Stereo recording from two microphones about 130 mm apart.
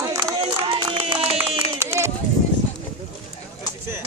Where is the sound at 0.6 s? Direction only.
40° right (ahead or behind).